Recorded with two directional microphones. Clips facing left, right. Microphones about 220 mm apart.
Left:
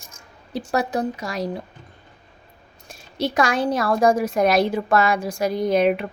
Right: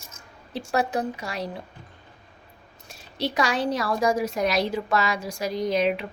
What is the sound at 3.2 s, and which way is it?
A woman's voice, 50° left (ahead or behind).